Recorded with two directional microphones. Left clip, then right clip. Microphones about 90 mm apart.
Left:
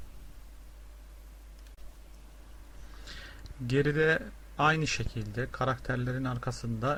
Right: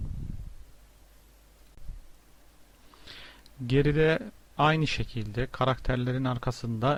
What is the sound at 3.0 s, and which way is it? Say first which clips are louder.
A man's voice: even; 25° right (ahead or behind).